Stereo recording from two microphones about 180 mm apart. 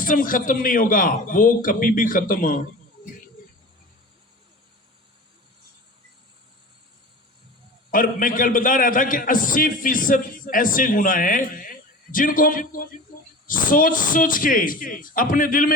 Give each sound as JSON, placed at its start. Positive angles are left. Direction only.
{"t": 0.0, "sound": "a man's voice", "side_deg": 50}
{"t": 7.9, "sound": "a man's voice", "side_deg": 50}